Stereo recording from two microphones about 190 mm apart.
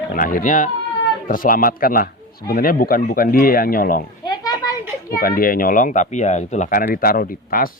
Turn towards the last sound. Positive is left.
turn(degrees=50)  # may be behind; listen again after turning